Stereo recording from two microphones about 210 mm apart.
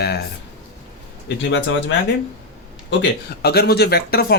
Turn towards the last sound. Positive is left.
turn(degrees=50)  # may be behind; listen again after turning